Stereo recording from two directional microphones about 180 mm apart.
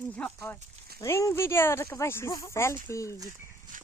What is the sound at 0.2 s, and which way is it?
Speech, 10° left (ahead or behind).